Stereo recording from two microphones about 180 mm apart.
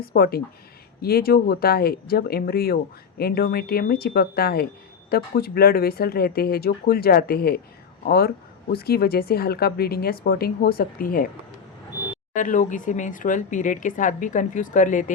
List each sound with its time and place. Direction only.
0.0 s a woman's voice: 60° left (ahead or behind)
12.3 s speech: 45° left (ahead or behind)